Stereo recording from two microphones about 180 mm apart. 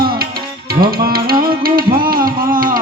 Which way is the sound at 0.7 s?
55° right (ahead or behind).